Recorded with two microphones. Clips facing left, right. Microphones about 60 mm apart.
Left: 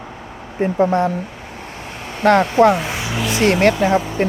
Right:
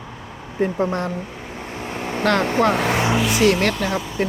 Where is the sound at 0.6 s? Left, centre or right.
Left.